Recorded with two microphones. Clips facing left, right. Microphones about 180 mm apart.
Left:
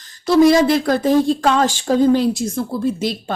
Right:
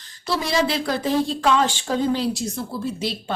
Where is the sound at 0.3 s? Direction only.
45° left (ahead or behind).